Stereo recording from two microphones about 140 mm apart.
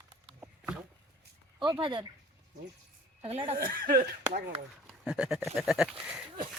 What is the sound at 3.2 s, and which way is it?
Speech, 45° right (ahead or behind).